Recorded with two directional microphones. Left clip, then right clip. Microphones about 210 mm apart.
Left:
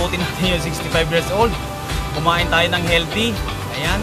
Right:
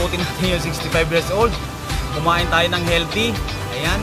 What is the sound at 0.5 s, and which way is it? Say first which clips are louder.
Speech: left 1 dB; 15° right (ahead or behind).